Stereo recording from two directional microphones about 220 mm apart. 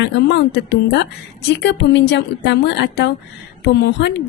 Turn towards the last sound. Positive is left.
turn(degrees=50)  # may be behind; listen again after turning